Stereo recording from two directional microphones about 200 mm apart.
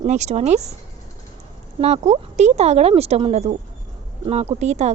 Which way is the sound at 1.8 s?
30° right (ahead or behind).